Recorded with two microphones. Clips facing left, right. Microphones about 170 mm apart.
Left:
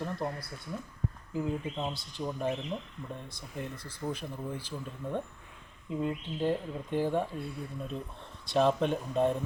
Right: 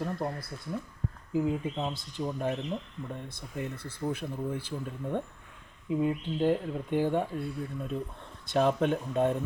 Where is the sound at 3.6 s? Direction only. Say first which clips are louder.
Right 3 dB; 55° right (ahead or behind).